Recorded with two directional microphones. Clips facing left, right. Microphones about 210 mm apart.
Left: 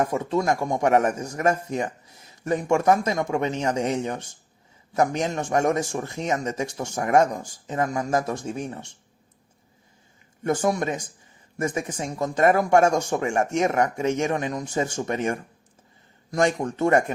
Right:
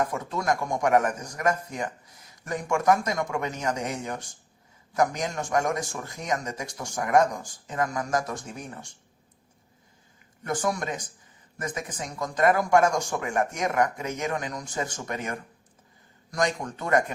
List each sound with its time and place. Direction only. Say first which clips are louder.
0.0 s speech: left 5 dB; 25° left (ahead or behind)
10.4 s speech: left 5 dB; 25° left (ahead or behind)
16.7 s speech: left 4 dB; 25° left (ahead or behind)